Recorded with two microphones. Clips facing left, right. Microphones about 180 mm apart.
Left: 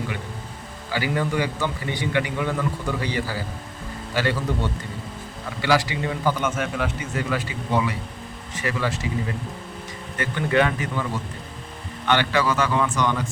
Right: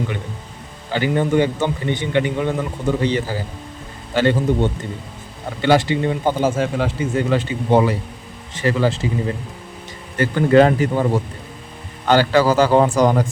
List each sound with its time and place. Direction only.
0.9 s a man's voice: 25° right (ahead or behind)
5.6 s a man's voice: 25° right (ahead or behind)